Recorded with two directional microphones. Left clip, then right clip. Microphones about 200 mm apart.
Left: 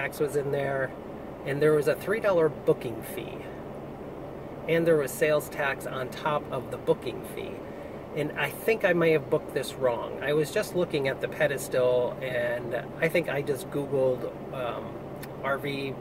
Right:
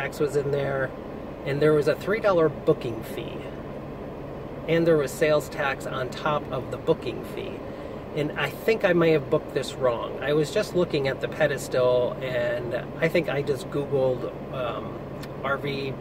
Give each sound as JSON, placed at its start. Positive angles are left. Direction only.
{"t": 0.0, "sound": "speech", "side_deg": 0}
{"t": 4.6, "sound": "speech", "side_deg": 0}
{"t": 8.2, "sound": "speech", "side_deg": 0}
{"t": 15.4, "sound": "speech", "side_deg": 0}